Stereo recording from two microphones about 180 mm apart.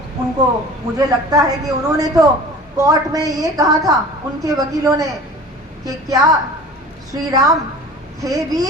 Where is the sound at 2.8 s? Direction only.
20° right (ahead or behind).